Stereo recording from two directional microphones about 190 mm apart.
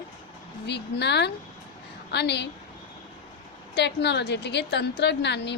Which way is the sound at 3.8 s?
65° left (ahead or behind).